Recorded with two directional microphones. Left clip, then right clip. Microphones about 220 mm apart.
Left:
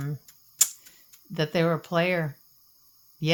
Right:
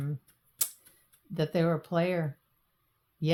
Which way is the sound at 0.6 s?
35° left (ahead or behind).